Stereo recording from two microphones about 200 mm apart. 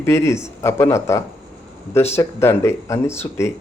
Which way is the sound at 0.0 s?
15° left (ahead or behind).